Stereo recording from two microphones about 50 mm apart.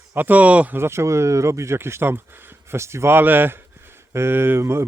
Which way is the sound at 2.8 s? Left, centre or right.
Right.